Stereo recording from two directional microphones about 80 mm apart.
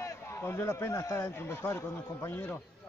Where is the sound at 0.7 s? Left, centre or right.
Left.